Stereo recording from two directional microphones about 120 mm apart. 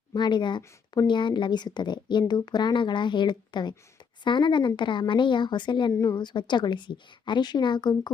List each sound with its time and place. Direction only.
0.1 s a woman's voice: 40° left (ahead or behind)
5.9 s a woman's voice: 30° left (ahead or behind)